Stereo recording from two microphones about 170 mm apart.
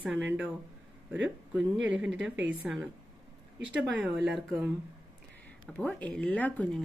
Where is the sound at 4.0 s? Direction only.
Centre (ahead or behind).